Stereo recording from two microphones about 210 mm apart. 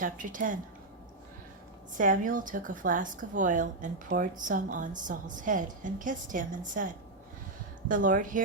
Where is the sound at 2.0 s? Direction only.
40° right (ahead or behind).